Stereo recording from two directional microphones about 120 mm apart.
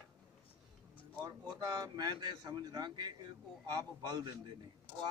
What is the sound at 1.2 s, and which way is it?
A man's voice, 30° right (ahead or behind).